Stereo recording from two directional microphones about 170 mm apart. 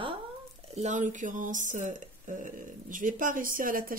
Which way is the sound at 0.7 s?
45° right (ahead or behind).